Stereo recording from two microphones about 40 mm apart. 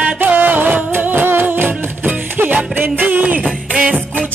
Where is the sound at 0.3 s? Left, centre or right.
Right.